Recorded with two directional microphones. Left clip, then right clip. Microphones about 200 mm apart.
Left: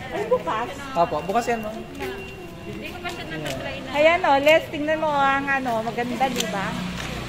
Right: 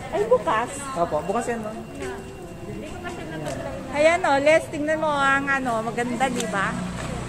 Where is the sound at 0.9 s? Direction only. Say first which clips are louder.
Left 3 dB; 55° left (ahead or behind).